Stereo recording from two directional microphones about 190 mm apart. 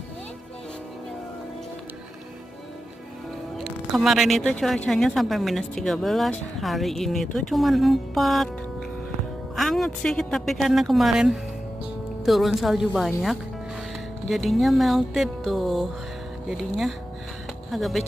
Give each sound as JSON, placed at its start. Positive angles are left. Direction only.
{"t": 3.6, "sound": "a woman's voice", "side_deg": 0}
{"t": 9.6, "sound": "a woman's voice", "side_deg": 0}
{"t": 14.2, "sound": "a woman's voice", "side_deg": 0}